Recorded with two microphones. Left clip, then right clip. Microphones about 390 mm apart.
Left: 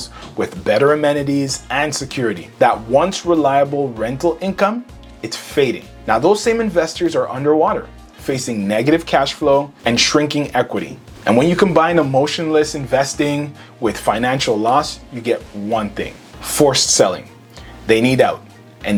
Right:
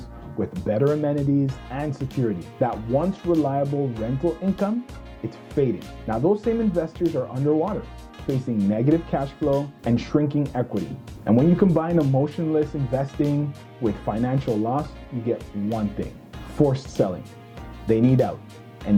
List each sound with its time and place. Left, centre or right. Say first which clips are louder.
0.0 s speech: left 8 dB; centre